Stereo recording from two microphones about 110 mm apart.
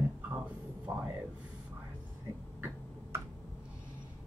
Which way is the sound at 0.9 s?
20° right (ahead or behind).